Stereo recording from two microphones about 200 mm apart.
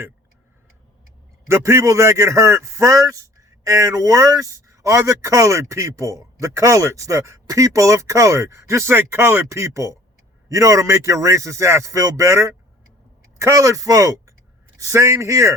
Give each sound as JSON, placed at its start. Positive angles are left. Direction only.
{"t": 1.5, "sound": "a man's voice", "side_deg": -15}